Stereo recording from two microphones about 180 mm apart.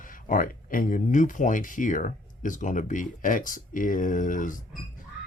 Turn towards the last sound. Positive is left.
turn(degrees=45)  # may be behind; listen again after turning